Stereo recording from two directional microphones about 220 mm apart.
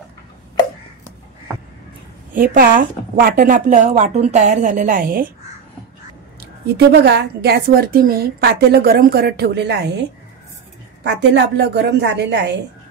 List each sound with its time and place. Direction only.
2.3 s a woman's voice: 40° right (ahead or behind)
6.9 s a woman's voice: 50° right (ahead or behind)
11.1 s a woman's voice: 50° right (ahead or behind)